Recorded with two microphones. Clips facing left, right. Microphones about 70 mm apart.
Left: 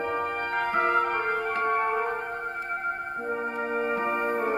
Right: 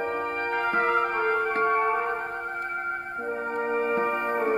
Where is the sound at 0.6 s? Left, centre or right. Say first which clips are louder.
Even; right.